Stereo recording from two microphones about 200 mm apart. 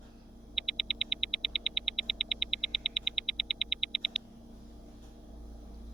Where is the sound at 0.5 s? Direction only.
Centre (ahead or behind).